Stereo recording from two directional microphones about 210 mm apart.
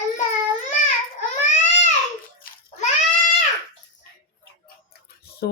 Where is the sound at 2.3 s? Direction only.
45° left (ahead or behind).